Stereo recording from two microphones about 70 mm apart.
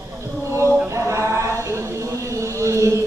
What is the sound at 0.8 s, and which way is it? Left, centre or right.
Chant, right.